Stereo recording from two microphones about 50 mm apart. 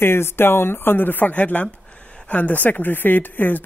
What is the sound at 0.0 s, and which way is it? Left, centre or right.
Speech, left.